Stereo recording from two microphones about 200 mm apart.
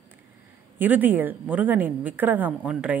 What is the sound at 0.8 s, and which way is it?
A woman's voice, 10° right (ahead or behind).